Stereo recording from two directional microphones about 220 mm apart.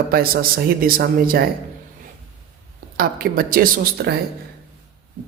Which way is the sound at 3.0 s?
40° right (ahead or behind).